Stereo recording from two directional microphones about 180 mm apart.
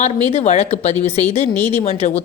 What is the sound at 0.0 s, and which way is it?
Speech, 35° left (ahead or behind).